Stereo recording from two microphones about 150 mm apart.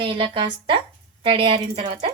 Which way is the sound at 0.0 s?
35° right (ahead or behind).